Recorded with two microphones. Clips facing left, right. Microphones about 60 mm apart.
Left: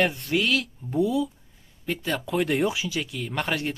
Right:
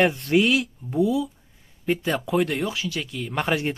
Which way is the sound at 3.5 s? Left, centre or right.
Centre.